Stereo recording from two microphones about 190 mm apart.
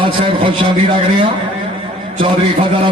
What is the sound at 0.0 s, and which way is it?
A man's voice, 25° right (ahead or behind).